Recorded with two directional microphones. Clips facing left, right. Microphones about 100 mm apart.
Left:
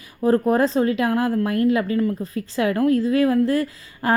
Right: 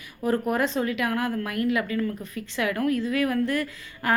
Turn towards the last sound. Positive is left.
turn(degrees=30)  # may be behind; listen again after turning